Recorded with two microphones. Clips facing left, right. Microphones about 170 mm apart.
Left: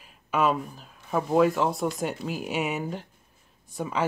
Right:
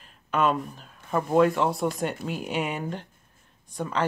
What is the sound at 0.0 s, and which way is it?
Speech, 5° left (ahead or behind).